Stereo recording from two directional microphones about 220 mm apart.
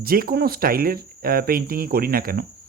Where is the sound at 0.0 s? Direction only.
40° right (ahead or behind).